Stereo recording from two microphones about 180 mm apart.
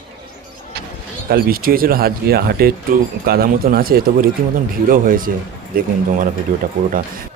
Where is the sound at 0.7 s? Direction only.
60° right (ahead or behind).